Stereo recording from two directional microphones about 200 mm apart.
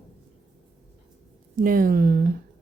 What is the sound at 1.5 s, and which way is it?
Speech, 45° right (ahead or behind).